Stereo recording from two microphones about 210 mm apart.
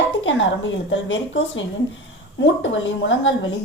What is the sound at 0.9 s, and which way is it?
A woman's voice, 65° left (ahead or behind).